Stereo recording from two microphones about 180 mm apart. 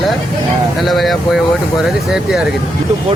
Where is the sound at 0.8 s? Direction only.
Centre (ahead or behind).